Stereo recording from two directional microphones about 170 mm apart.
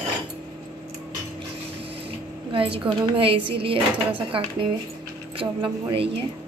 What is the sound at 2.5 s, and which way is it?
A woman's voice, 30° right (ahead or behind).